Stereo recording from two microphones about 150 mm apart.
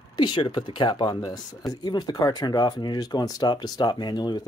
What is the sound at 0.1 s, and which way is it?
Speech, 30° left (ahead or behind).